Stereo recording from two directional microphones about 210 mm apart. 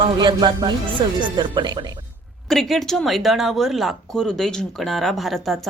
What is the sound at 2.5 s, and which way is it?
Speech, centre (ahead or behind).